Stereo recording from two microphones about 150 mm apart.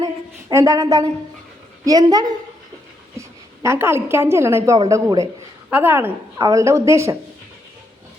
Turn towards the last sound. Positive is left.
turn(degrees=-20)  # may be behind; listen again after turning